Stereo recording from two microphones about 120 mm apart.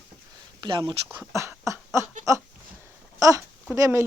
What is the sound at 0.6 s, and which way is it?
Speech, 40° right (ahead or behind).